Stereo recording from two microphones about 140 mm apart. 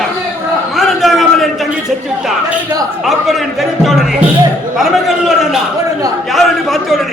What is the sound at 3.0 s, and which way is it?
A man's voice, centre (ahead or behind).